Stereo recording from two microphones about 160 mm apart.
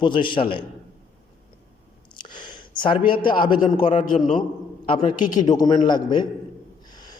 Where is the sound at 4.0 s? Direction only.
55° left (ahead or behind).